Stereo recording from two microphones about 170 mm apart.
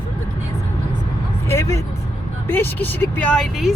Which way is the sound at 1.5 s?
15° left (ahead or behind).